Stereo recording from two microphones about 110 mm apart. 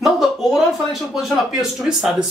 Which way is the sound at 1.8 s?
Centre (ahead or behind).